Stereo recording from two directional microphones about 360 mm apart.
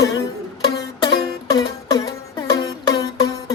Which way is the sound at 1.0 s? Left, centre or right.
Centre.